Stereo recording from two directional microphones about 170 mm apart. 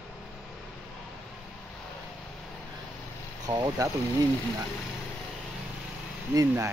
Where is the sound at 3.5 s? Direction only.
25° right (ahead or behind).